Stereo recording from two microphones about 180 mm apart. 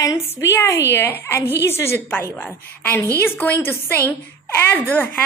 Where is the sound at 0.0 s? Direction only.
15° left (ahead or behind).